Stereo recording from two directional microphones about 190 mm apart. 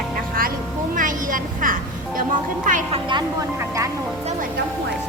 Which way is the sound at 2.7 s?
40° right (ahead or behind).